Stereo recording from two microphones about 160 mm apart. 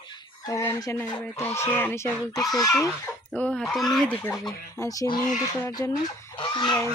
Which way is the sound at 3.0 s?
10° left (ahead or behind).